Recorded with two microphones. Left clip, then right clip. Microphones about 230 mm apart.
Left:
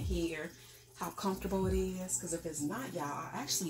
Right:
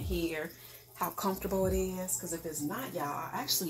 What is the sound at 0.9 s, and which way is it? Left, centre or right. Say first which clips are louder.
Speech: right 4 dB; centre.